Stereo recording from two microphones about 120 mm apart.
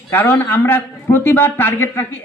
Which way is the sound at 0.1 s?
15° left (ahead or behind).